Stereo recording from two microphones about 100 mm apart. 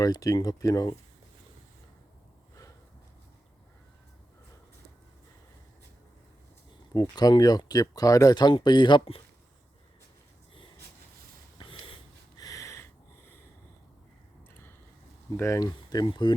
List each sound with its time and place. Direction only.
0.0 s speech: 40° left (ahead or behind)
6.9 s speech: 40° left (ahead or behind)
11.5 s a sound: 60° left (ahead or behind)
12.4 s snort: 35° left (ahead or behind)
15.4 s speech: 30° left (ahead or behind); by 16.3 s 50° left (ahead or behind)